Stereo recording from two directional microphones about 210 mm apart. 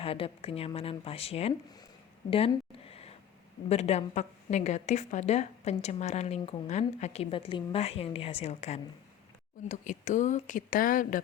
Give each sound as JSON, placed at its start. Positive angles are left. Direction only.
{"t": 0.0, "sound": "speech", "side_deg": 25}
{"t": 3.7, "sound": "a woman's voice", "side_deg": 30}